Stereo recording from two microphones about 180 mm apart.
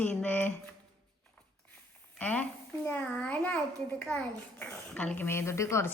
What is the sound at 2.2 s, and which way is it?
Speech, 10° left (ahead or behind).